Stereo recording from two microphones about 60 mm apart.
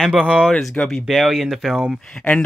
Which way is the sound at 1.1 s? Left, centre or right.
Centre.